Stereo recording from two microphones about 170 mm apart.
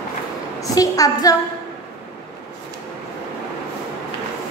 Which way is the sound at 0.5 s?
20° left (ahead or behind).